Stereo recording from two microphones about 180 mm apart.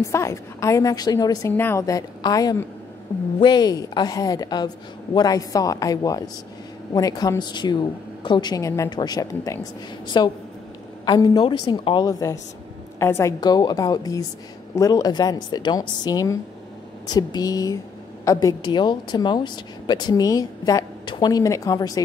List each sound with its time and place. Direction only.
0.0 s a woman's voice: 15° left (ahead or behind)